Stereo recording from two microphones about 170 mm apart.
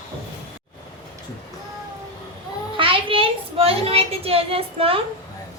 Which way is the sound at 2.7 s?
30° right (ahead or behind).